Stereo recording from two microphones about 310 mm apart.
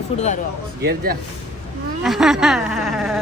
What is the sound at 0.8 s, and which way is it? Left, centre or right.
Speech, right.